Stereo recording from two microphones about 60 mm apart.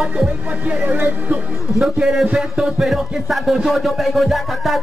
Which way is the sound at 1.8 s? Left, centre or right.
Centre.